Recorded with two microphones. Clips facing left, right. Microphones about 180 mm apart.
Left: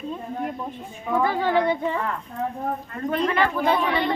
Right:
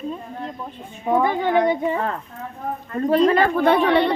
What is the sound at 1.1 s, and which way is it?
Speech, 20° right (ahead or behind).